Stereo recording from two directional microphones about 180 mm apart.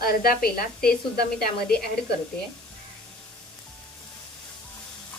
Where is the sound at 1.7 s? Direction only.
60° left (ahead or behind).